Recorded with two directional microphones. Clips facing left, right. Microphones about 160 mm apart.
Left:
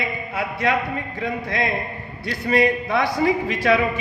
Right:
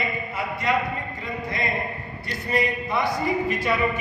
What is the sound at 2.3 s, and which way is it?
A man's voice, 75° left (ahead or behind).